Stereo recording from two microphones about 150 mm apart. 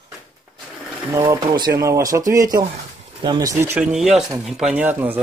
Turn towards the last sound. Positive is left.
turn(degrees=-10)  # may be behind; listen again after turning